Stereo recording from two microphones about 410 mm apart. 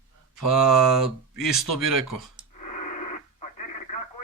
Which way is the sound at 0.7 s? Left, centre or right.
Centre.